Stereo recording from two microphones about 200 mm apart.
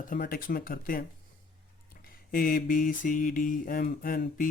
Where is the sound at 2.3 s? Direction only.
45° left (ahead or behind).